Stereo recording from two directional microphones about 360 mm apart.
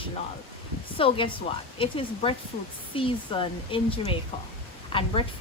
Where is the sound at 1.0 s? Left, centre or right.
Centre.